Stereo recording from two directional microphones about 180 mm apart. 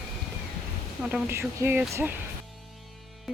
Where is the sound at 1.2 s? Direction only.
15° right (ahead or behind).